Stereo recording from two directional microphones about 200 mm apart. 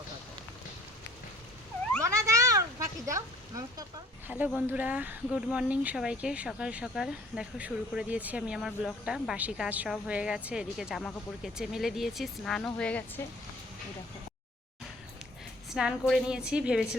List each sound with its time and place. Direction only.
2.0 s a sound: 15° right (ahead or behind)
4.3 s speech: 10° right (ahead or behind); by 13.2 s 10° left (ahead or behind)
15.7 s speech: centre (ahead or behind)